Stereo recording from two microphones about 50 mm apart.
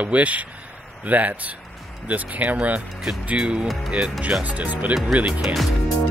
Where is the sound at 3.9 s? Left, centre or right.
Right.